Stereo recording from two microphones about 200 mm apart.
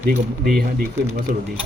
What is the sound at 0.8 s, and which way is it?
Speech, 45° right (ahead or behind).